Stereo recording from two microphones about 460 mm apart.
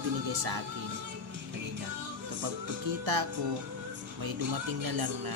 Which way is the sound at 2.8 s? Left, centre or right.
Right.